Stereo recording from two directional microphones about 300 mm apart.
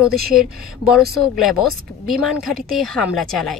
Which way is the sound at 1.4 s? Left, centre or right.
Centre.